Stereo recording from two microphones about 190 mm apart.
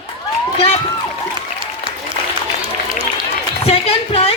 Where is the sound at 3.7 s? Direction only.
30° left (ahead or behind).